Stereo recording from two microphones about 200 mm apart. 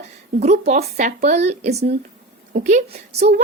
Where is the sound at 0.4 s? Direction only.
35° right (ahead or behind).